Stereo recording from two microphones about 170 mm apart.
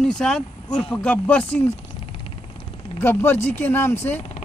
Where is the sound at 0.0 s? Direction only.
5° left (ahead or behind).